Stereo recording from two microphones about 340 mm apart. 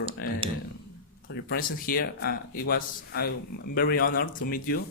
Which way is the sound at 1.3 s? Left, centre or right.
Left.